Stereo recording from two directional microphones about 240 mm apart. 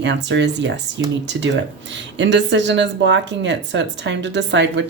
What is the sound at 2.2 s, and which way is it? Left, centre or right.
Speech, right.